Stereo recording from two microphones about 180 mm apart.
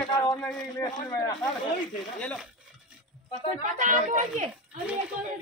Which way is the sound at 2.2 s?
5° left (ahead or behind).